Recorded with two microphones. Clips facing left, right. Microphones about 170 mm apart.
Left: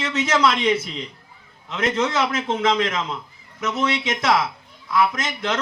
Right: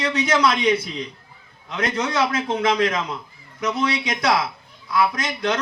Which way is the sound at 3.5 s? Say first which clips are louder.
Even; 25° left (ahead or behind).